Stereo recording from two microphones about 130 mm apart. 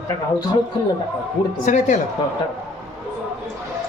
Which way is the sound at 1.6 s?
65° left (ahead or behind).